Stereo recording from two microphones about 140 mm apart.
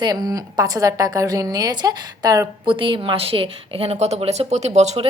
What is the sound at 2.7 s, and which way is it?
A woman's voice, 35° right (ahead or behind).